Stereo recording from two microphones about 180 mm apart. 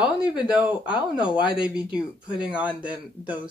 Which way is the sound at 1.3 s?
25° left (ahead or behind).